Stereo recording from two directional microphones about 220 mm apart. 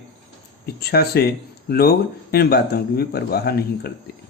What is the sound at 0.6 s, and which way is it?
Speech, 45° left (ahead or behind).